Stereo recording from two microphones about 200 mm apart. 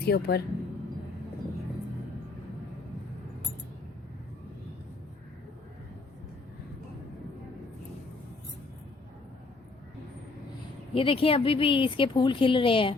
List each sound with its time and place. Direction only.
0.0 s speech: 55° left (ahead or behind)
10.9 s speech: 25° left (ahead or behind)